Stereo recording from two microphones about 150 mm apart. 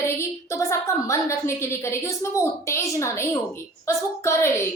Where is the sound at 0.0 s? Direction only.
20° left (ahead or behind).